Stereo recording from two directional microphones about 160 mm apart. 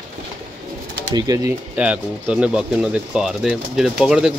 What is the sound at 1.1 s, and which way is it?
Speech, 20° right (ahead or behind).